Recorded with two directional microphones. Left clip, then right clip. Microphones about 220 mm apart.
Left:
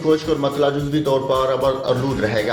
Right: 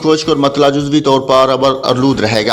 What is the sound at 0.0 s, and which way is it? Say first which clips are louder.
A man's voice: right 7 dB; 40° right (ahead or behind).